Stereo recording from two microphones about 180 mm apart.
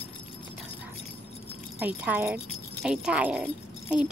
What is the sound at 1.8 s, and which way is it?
Speech, 10° right (ahead or behind).